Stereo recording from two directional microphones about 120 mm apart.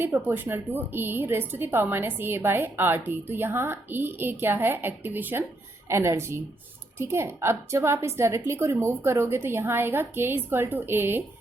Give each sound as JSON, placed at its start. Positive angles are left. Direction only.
{"t": 0.0, "sound": "a woman's voice", "side_deg": -15}